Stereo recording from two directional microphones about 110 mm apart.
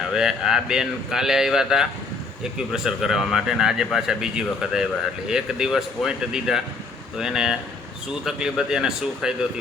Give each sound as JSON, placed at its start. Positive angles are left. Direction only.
{"t": 0.1, "sound": "speech", "side_deg": -5}